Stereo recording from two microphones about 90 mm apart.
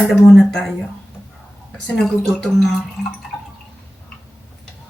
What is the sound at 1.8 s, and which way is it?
Speech, 5° left (ahead or behind).